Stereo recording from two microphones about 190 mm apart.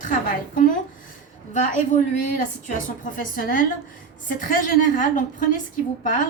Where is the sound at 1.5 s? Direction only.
40° left (ahead or behind).